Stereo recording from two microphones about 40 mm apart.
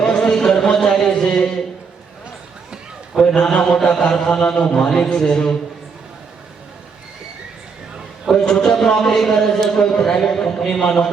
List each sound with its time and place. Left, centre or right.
0.0 s a sound: centre
3.2 s speech: centre
8.3 s a man's voice: centre